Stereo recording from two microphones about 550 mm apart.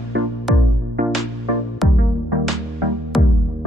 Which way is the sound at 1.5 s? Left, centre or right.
Left.